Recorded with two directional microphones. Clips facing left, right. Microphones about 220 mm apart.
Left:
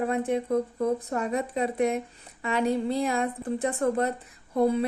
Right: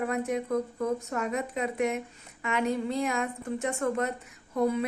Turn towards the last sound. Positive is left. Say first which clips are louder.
# left 3 dB
turn(degrees=30)  # may be behind; listen again after turning